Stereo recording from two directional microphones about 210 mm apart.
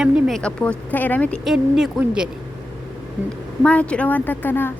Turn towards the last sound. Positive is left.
turn(degrees=10)  # may be behind; listen again after turning